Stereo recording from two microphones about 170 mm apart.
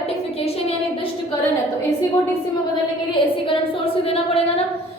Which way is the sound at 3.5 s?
35° left (ahead or behind).